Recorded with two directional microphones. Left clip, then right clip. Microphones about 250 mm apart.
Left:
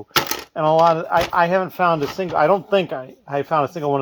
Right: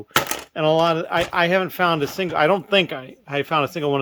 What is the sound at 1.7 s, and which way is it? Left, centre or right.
Speech, centre.